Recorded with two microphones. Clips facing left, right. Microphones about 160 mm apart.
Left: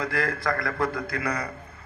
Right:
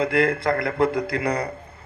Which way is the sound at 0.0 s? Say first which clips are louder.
Right 7 dB; 25° right (ahead or behind).